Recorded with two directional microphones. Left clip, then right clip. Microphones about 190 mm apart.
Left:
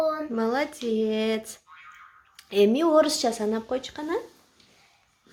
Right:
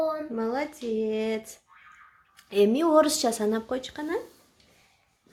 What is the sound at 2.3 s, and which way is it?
Speech, centre (ahead or behind).